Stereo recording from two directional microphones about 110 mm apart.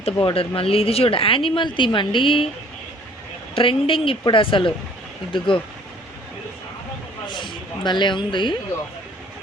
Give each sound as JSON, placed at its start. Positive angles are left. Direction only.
{"t": 0.0, "sound": "speech", "side_deg": 55}
{"t": 3.5, "sound": "a woman's voice", "side_deg": 55}
{"t": 7.3, "sound": "speech", "side_deg": 45}